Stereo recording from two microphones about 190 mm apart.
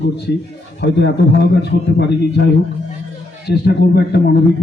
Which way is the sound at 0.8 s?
60° left (ahead or behind).